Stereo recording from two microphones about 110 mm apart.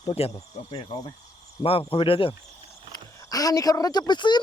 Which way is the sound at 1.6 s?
60° left (ahead or behind).